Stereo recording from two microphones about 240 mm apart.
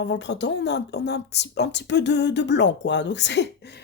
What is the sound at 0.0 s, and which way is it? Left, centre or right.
A woman's voice, left.